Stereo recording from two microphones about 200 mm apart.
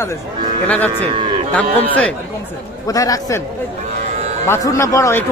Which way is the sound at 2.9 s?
15° left (ahead or behind).